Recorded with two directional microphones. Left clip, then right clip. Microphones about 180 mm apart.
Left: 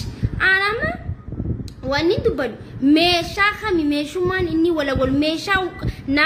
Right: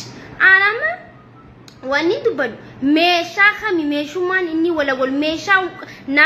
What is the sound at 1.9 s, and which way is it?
A woman's voice, 40° left (ahead or behind).